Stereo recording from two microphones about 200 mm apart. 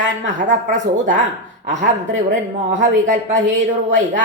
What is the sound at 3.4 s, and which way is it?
Speech, 65° right (ahead or behind).